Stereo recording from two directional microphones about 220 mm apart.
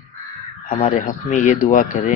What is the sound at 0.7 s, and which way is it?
Speech, 35° left (ahead or behind).